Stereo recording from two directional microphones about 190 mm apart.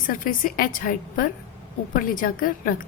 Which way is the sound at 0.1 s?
45° left (ahead or behind).